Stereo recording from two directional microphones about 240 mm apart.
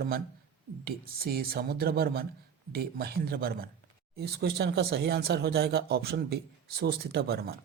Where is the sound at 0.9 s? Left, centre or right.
Right.